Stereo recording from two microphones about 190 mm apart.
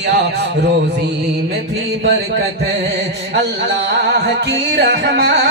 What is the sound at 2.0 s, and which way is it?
Music, 70° right (ahead or behind).